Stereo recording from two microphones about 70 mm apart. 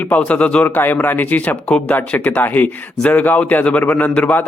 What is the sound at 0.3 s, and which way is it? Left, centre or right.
Speech, centre.